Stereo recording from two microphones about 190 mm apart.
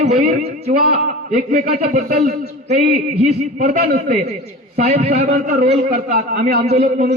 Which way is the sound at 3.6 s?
35° right (ahead or behind).